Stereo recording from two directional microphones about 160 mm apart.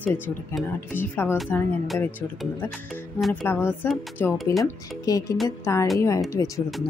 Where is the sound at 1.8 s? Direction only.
Centre (ahead or behind).